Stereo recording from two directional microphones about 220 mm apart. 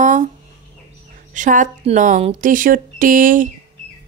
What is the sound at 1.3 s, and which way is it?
Speech, 35° right (ahead or behind).